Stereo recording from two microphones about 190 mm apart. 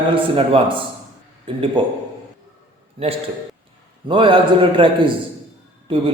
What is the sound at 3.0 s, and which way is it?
A man's voice, 25° right (ahead or behind).